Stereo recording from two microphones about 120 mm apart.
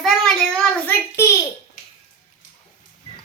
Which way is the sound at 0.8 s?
20° left (ahead or behind).